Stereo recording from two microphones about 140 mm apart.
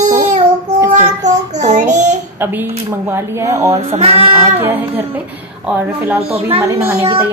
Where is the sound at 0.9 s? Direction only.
55° right (ahead or behind).